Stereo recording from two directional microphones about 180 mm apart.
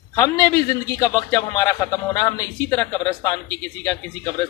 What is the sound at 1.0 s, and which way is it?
A man's voice, 15° left (ahead or behind).